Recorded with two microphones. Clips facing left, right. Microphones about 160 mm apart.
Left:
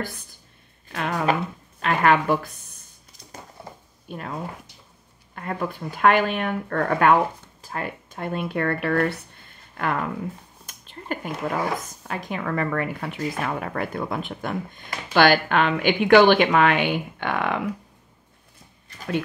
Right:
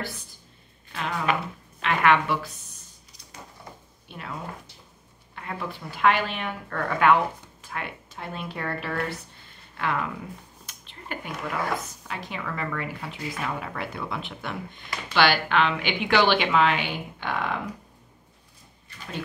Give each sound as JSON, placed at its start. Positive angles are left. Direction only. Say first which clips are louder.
{"t": 0.9, "sound": "speech", "louder": "left 4 dB", "side_deg": 50}
{"t": 4.1, "sound": "speech", "louder": "left 4 dB", "side_deg": 45}
{"t": 9.8, "sound": "speech", "louder": "left 3 dB", "side_deg": 45}